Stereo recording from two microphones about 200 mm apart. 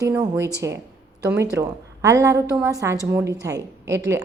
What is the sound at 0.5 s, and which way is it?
A woman's voice, 15° right (ahead or behind).